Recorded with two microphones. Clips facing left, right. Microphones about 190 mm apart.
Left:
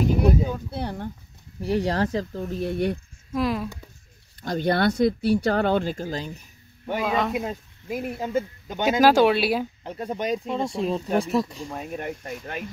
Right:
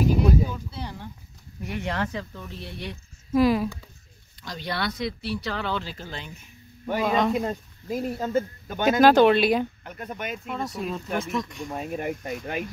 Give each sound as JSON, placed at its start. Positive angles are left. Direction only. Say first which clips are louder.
{"t": 0.7, "sound": "a sound", "louder": "left 6 dB", "side_deg": 55}
{"t": 1.6, "sound": "speech", "louder": "left 6 dB", "side_deg": 35}
{"t": 3.3, "sound": "speech", "louder": "right 5 dB", "side_deg": 0}
{"t": 4.4, "sound": "speech", "louder": "left 9 dB", "side_deg": 50}
{"t": 7.0, "sound": "speech", "louder": "right 2 dB", "side_deg": 0}
{"t": 9.8, "sound": "speech", "louder": "left 7 dB", "side_deg": 30}
{"t": 11.7, "sound": "speech", "louder": "right 4 dB", "side_deg": 0}